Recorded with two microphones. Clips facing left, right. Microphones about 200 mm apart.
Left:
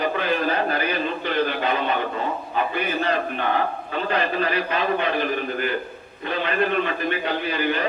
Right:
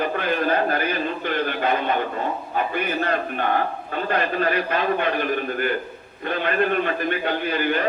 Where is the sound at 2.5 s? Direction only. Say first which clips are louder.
Even; 50° right (ahead or behind).